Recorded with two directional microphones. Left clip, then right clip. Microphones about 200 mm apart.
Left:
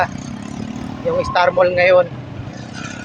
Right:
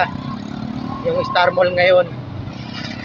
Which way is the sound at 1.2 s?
25° left (ahead or behind).